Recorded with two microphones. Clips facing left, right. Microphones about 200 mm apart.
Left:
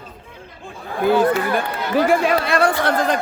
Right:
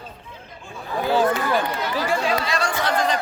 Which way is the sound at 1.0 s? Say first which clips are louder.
Left 4 dB; 55° left (ahead or behind).